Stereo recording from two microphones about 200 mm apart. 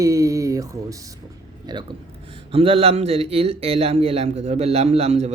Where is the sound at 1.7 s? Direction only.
20° right (ahead or behind).